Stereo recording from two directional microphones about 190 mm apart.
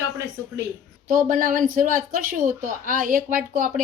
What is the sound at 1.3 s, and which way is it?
A woman's voice, 45° right (ahead or behind).